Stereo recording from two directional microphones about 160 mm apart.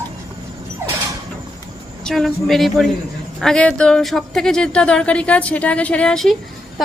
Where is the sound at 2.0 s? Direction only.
Centre (ahead or behind).